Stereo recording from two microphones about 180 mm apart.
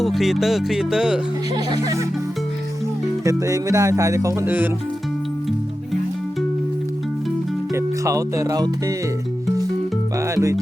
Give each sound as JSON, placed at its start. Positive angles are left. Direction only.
{"t": 0.0, "sound": "speech", "side_deg": 0}
{"t": 1.5, "sound": "music", "side_deg": -20}
{"t": 3.2, "sound": "speech", "side_deg": -20}
{"t": 7.7, "sound": "speech", "side_deg": -15}
{"t": 10.2, "sound": "speech", "side_deg": -15}